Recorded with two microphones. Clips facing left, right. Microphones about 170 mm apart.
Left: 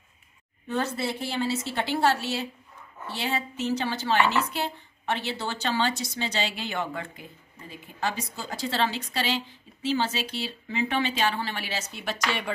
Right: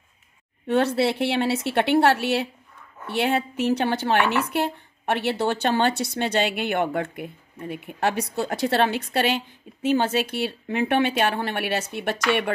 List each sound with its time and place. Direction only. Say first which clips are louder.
0.7 s a woman's voice: right 8 dB; 70° right (ahead or behind)